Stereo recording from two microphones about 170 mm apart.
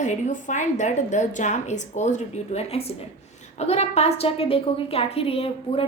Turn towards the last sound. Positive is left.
turn(degrees=35)  # may be behind; listen again after turning